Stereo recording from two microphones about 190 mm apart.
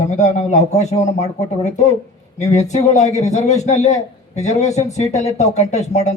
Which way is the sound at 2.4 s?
35° left (ahead or behind).